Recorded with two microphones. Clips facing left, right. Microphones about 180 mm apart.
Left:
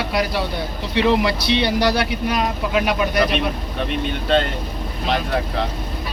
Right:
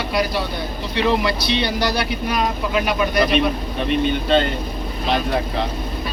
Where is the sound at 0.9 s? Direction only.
25° left (ahead or behind).